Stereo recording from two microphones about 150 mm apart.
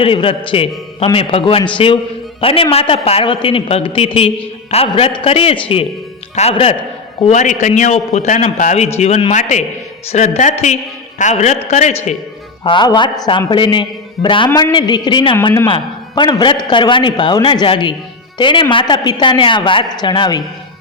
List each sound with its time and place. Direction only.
0.0 s a man's voice: 35° left (ahead or behind)
7.2 s a man's voice: 50° left (ahead or behind)
12.6 s a man's voice: 30° left (ahead or behind)